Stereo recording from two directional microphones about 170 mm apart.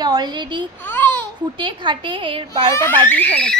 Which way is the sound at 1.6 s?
30° right (ahead or behind).